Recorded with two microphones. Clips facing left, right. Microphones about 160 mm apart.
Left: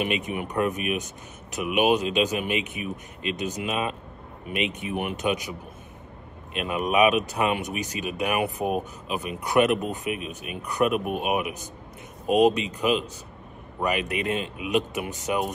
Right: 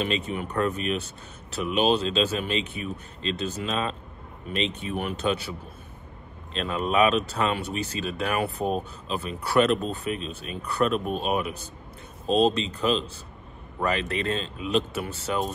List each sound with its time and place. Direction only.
0.0 s speech: 15° left (ahead or behind)